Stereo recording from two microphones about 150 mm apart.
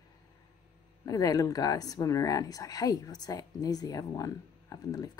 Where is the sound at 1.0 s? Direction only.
25° left (ahead or behind).